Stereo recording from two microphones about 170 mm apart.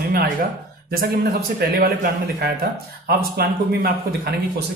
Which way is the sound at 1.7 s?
60° right (ahead or behind).